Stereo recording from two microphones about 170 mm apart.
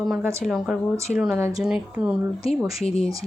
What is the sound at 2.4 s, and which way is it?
Speech, 35° left (ahead or behind).